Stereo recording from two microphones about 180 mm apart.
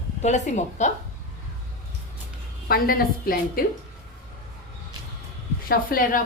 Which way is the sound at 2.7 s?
55° left (ahead or behind).